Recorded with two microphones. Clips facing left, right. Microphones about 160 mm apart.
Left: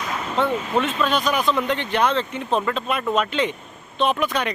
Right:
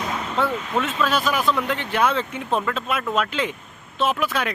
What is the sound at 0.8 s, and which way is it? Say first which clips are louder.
Speech: even; centre (ahead or behind).